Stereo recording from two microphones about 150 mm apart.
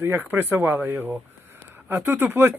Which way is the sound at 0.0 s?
15° right (ahead or behind).